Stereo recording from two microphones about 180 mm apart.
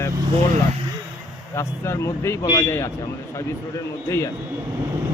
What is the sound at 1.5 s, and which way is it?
Speech, 15° left (ahead or behind).